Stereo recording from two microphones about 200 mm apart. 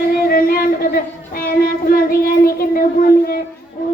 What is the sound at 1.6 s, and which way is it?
Child singing, 50° left (ahead or behind).